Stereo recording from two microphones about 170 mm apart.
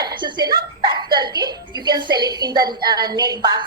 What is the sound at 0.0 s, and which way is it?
A woman's voice, 25° right (ahead or behind).